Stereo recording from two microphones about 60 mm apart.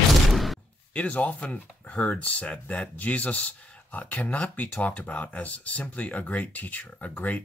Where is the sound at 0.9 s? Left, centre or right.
Left.